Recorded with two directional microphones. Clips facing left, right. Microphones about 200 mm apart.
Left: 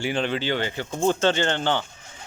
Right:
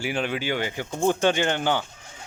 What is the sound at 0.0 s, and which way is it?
A man's voice, 10° right (ahead or behind).